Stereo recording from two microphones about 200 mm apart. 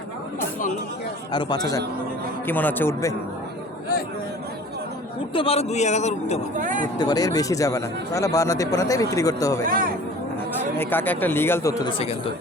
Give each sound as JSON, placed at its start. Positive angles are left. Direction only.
{"t": 1.3, "sound": "a man's voice", "side_deg": 20}
{"t": 5.3, "sound": "a man's voice", "side_deg": 25}
{"t": 6.6, "sound": "speech", "side_deg": -40}
{"t": 7.0, "sound": "speech", "side_deg": 20}
{"t": 9.6, "sound": "speech", "side_deg": -45}
{"t": 10.8, "sound": "speech", "side_deg": 10}